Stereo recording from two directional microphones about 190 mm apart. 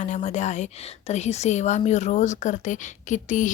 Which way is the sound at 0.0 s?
40° left (ahead or behind).